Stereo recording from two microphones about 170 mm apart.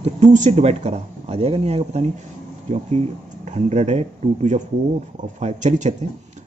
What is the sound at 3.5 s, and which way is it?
Speech, 40° right (ahead or behind).